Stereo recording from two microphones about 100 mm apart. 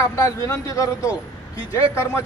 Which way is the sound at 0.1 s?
30° left (ahead or behind).